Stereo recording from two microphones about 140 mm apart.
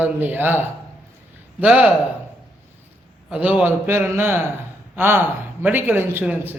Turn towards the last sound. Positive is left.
turn(degrees=-15)  # may be behind; listen again after turning